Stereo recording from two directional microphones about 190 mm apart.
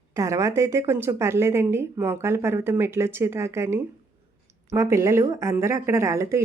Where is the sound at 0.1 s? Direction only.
15° right (ahead or behind).